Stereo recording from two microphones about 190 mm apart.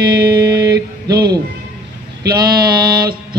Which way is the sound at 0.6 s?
55° right (ahead or behind).